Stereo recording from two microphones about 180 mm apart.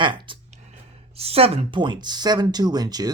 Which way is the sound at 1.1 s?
35° right (ahead or behind).